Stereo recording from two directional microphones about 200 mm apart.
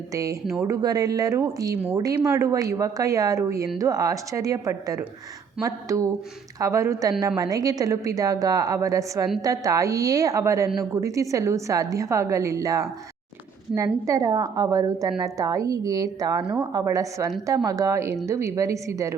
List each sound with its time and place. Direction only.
0.1 s speech: 15° right (ahead or behind)